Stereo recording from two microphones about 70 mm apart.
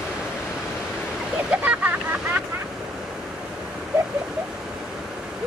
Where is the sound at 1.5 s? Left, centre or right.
Right.